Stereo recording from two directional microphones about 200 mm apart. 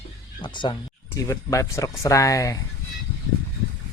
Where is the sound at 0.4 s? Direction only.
25° left (ahead or behind).